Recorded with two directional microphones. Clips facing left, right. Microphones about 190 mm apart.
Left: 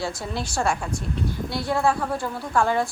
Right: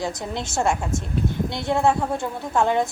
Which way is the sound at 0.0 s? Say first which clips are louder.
Right 1 dB; 20° right (ahead or behind).